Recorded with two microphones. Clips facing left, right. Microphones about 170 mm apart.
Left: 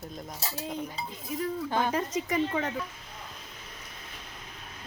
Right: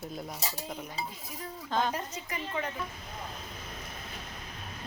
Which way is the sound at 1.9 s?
90° left.